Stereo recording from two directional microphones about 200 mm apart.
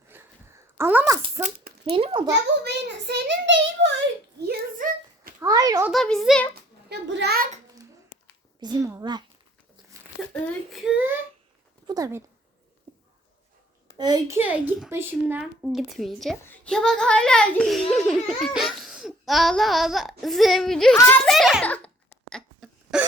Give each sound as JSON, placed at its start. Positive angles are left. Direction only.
{"t": 0.1, "sound": "a sound", "side_deg": -10}
{"t": 1.2, "sound": "speech", "side_deg": -35}
{"t": 2.6, "sound": "a child's voice", "side_deg": -55}
{"t": 4.4, "sound": "a sound", "side_deg": -50}
{"t": 5.4, "sound": "a child's voice", "side_deg": -20}
{"t": 5.9, "sound": "laughter", "side_deg": 0}
{"t": 6.5, "sound": "a sound", "side_deg": -55}
{"t": 8.6, "sound": "speech", "side_deg": -20}
{"t": 10.3, "sound": "laughter", "side_deg": 5}
{"t": 11.9, "sound": "a child's voice", "side_deg": -15}
{"t": 13.9, "sound": "a child's voice", "side_deg": -20}
{"t": 14.3, "sound": "laughter", "side_deg": -10}
{"t": 22.3, "sound": "cough", "side_deg": 0}